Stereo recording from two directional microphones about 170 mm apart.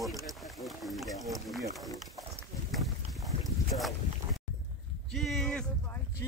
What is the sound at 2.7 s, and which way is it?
Boat, centre (ahead or behind).